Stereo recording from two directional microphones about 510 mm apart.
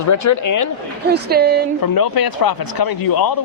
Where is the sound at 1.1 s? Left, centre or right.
Centre.